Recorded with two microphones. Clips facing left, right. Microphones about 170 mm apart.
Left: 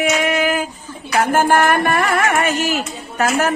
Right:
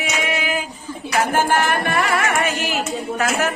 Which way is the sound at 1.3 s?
50° left (ahead or behind).